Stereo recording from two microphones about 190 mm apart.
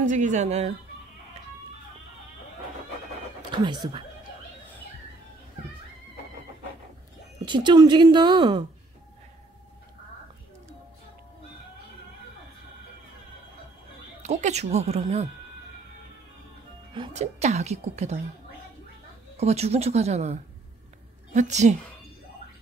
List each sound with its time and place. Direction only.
0.0 s speech: 40° right (ahead or behind)
3.5 s a woman's voice: 25° right (ahead or behind)
7.4 s a woman's voice: 25° right (ahead or behind)
14.2 s speech: 35° right (ahead or behind)
17.1 s speech: 35° right (ahead or behind)
19.3 s speech: 35° right (ahead or behind)